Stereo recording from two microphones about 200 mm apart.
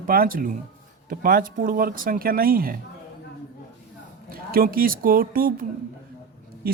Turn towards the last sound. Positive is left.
turn(degrees=-45)  # may be behind; listen again after turning